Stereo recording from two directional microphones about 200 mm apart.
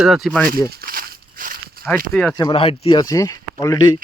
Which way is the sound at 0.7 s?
50° right (ahead or behind).